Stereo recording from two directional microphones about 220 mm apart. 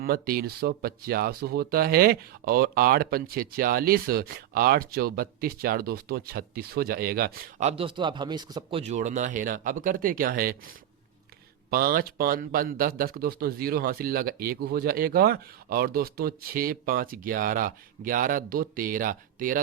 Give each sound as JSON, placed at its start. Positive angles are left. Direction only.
{"t": 0.0, "sound": "speech", "side_deg": -40}
{"t": 7.6, "sound": "speech", "side_deg": -25}
{"t": 11.7, "sound": "speech", "side_deg": -40}